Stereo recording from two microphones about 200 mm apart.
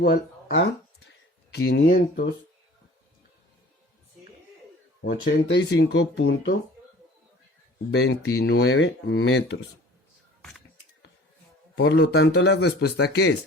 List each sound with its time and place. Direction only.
0.0 s speech: 55° left (ahead or behind)
5.0 s speech: 45° left (ahead or behind)
5.5 s speech: 60° left (ahead or behind)
7.9 s speech: 60° left (ahead or behind)
11.8 s speech: 60° left (ahead or behind)